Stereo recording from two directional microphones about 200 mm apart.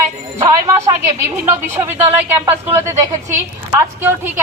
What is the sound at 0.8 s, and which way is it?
A woman's voice, 15° right (ahead or behind).